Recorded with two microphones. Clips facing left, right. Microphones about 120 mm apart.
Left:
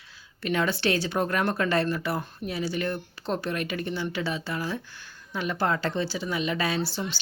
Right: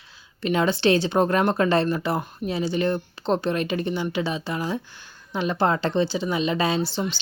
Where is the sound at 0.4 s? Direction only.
20° right (ahead or behind).